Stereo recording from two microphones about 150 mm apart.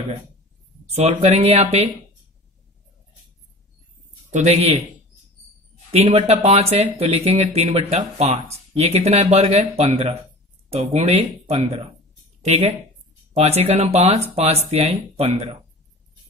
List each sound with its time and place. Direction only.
0.8 s speech: 45° right (ahead or behind)
4.3 s a man's voice: 50° right (ahead or behind)
5.9 s speech: 40° right (ahead or behind)